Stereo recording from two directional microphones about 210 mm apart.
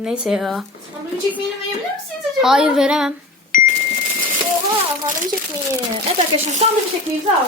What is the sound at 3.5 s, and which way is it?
Cash register, 40° left (ahead or behind).